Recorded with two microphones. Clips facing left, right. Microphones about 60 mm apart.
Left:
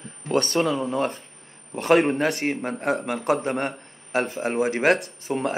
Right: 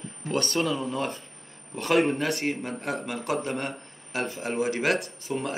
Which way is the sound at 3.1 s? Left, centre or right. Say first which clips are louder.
Left 5 dB; left.